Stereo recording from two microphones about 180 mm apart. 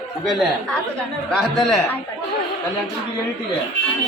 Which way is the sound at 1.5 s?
Centre (ahead or behind).